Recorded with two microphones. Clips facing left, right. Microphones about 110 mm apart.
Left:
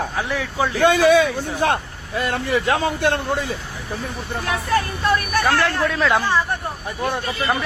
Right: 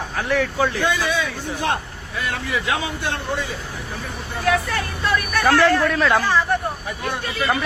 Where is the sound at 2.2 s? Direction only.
40° left (ahead or behind).